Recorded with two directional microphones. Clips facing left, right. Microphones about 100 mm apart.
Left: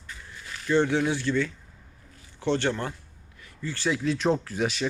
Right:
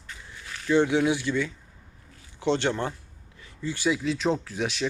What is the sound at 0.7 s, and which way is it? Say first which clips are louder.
Speech: right 2 dB; 15° right (ahead or behind).